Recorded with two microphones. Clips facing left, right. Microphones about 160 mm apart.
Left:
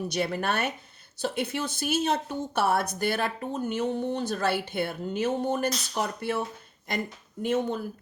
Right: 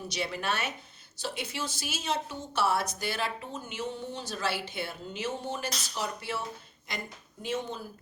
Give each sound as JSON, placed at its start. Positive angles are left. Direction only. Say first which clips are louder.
{"t": 0.1, "sound": "speech", "louder": "left 2 dB", "side_deg": 50}